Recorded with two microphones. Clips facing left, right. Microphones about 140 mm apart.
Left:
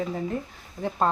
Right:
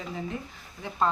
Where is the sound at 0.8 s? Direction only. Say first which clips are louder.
Left 9 dB; 50° left (ahead or behind).